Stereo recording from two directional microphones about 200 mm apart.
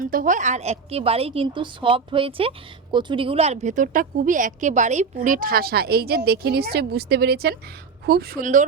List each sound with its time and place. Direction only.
0.0 s a woman's voice: 40° right (ahead or behind)